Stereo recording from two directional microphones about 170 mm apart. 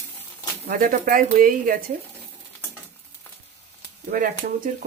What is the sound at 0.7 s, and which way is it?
Speech, 55° right (ahead or behind).